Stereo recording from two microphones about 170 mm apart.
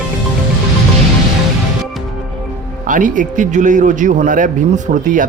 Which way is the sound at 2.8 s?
50° right (ahead or behind).